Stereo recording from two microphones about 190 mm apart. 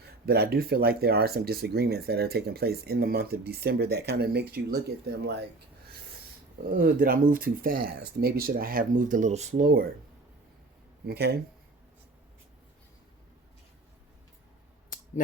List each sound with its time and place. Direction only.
0.0 s speech: 55° right (ahead or behind)
6.7 s speech: 50° right (ahead or behind)
11.0 s speech: 55° right (ahead or behind)